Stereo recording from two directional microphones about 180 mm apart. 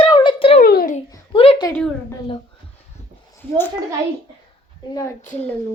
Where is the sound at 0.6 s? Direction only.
55° left (ahead or behind).